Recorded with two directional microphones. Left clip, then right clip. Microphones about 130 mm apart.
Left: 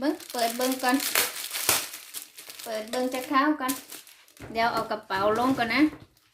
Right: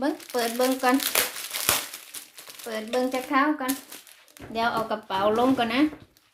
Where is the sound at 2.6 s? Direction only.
50° right (ahead or behind).